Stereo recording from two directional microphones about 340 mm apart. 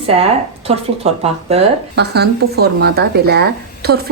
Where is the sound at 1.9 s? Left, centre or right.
Right.